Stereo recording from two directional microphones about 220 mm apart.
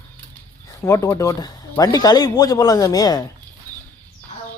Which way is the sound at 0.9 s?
15° left (ahead or behind).